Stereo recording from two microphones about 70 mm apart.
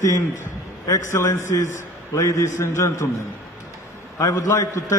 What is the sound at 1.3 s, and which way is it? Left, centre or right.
A man's voice, left.